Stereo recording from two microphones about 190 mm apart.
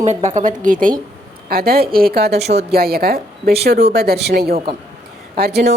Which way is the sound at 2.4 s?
35° right (ahead or behind).